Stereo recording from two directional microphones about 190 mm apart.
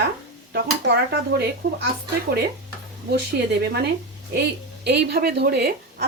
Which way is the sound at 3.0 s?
60° right (ahead or behind).